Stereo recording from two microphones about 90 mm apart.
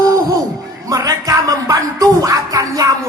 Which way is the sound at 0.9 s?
40° right (ahead or behind).